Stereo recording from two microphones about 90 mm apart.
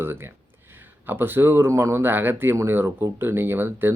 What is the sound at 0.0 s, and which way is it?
Speech, 25° right (ahead or behind).